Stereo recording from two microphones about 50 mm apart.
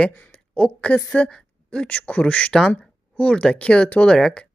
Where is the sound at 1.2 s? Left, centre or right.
Centre.